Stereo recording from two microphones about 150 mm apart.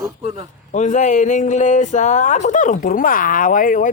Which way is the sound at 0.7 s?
55° left (ahead or behind).